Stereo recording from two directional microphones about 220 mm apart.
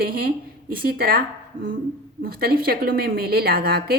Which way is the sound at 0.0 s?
45° right (ahead or behind).